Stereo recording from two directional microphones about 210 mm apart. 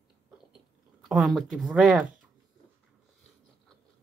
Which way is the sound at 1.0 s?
Centre (ahead or behind).